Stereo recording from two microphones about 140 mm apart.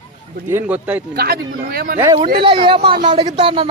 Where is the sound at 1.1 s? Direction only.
90° right.